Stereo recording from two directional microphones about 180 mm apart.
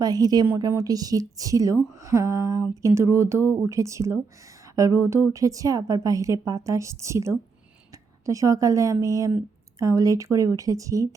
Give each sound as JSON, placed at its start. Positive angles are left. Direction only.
{"t": 0.0, "sound": "a woman's voice", "side_deg": -20}